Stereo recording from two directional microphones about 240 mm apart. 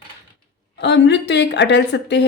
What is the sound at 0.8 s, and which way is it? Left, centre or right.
A woman's voice, left.